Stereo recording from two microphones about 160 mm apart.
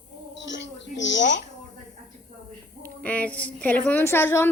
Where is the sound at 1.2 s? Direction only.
90° left.